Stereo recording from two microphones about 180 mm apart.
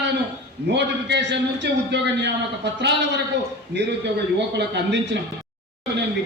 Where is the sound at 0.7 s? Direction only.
70° right (ahead or behind).